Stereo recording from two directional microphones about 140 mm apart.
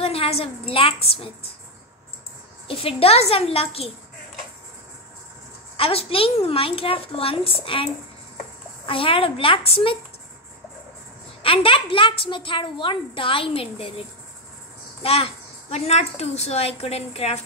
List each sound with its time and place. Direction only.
0.0 s a woman's voice: 45° left (ahead or behind)
2.7 s a woman's voice: 45° left (ahead or behind)
5.8 s a woman's voice: 45° left (ahead or behind)
11.4 s a woman's voice: 40° left (ahead or behind)